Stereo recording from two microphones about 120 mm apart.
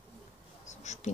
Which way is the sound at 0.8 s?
75° left (ahead or behind).